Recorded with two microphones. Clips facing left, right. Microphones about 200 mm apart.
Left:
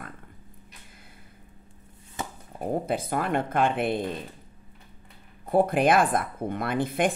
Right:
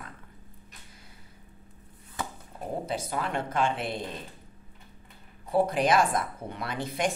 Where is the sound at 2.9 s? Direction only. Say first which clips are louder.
Left 3 dB; 55° left (ahead or behind).